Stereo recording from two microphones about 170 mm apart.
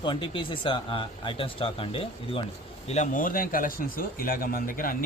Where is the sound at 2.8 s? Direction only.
45° left (ahead or behind).